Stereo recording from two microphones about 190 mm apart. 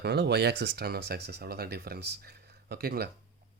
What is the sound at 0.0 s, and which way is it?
Speech, 60° right (ahead or behind).